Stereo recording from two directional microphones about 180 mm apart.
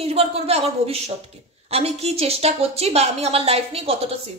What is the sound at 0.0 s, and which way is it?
A woman's voice, 35° right (ahead or behind).